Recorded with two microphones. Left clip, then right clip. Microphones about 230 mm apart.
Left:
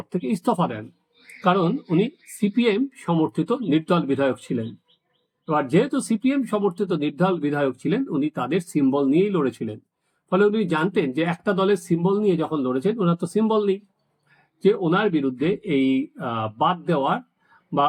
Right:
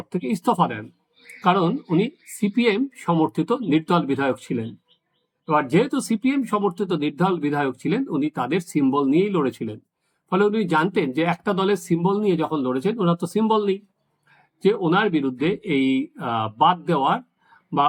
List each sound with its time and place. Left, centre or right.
0.1 s speech: centre